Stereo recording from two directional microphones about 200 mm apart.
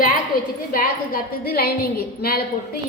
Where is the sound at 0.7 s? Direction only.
45° left (ahead or behind).